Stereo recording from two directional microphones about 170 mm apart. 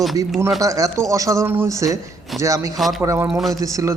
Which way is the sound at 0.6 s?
20° right (ahead or behind).